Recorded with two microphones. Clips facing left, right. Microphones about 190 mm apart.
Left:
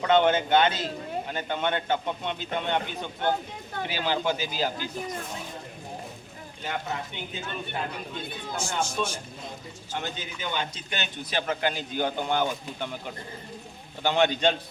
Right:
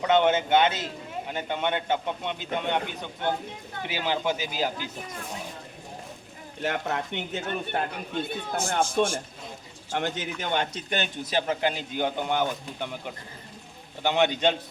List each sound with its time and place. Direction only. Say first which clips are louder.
0.0 s a man's voice: even; 15° right (ahead or behind)
3.9 s a man's voice: even; 15° right (ahead or behind)
6.6 s speech: right 4 dB; 70° right (ahead or behind)
7.4 s a man's voice: right 2 dB; 55° right (ahead or behind)
9.9 s a man's voice: right 5 dB; 80° right; by 10.8 s 65° right (ahead or behind)
10.8 s a man's voice: right 4 dB; 45° right (ahead or behind)
11.4 s speech: right 1 dB; 20° right (ahead or behind)
14.0 s a man's voice: even; 15° right (ahead or behind)